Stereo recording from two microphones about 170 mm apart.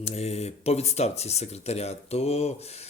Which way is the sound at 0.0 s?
40° left (ahead or behind).